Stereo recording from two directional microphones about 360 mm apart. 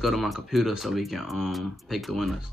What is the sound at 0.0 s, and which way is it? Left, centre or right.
Speech, centre.